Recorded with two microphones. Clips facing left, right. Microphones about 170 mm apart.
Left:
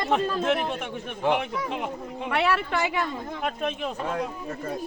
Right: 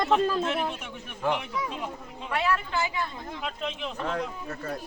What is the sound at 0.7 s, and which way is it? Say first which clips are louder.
A man's voice: left 7 dB; 60° left (ahead or behind).